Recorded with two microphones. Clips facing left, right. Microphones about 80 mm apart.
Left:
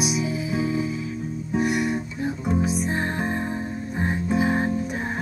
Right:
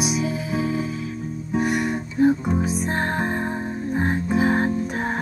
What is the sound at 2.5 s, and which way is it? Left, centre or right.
Music, centre.